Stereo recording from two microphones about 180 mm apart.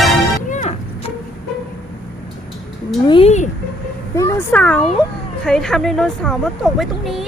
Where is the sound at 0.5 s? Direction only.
40° left (ahead or behind).